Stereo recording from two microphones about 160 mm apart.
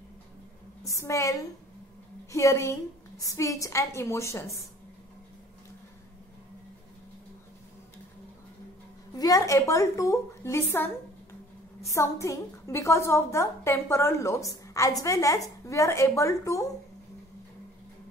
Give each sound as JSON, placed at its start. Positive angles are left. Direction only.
{"t": 0.8, "sound": "a woman's voice", "side_deg": 20}
{"t": 9.1, "sound": "a woman's voice", "side_deg": 20}